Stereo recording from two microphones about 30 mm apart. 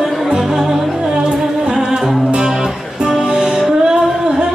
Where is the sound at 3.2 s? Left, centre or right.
Right.